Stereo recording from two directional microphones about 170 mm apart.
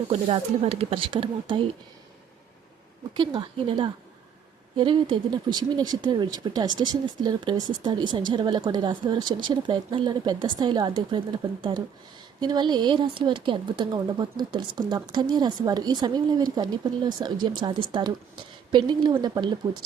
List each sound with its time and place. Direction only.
0.1 s speech: 35° right (ahead or behind)
3.2 s speech: 30° right (ahead or behind)